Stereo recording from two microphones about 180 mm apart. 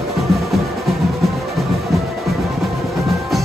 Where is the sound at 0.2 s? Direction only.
Centre (ahead or behind).